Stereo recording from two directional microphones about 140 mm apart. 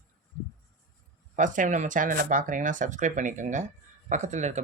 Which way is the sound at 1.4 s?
65° right (ahead or behind).